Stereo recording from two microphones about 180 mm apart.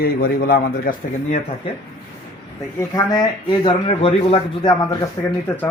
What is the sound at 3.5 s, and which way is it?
Speech, 30° left (ahead or behind).